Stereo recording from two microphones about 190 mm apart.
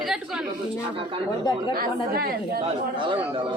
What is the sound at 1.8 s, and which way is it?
Speech, 50° right (ahead or behind).